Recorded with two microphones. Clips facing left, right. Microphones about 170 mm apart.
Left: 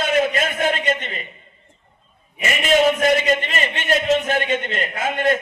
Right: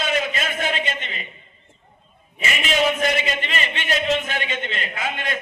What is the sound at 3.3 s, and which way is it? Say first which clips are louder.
A man's voice: left 6 dB; 45° left (ahead or behind).